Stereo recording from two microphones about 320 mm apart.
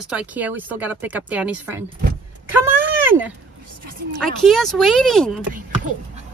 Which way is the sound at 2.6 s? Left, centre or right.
Centre.